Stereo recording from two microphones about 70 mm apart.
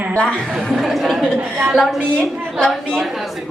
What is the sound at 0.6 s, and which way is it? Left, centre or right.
Speech, centre.